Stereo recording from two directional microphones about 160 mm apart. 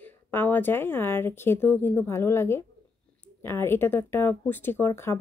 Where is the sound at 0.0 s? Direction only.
10° left (ahead or behind).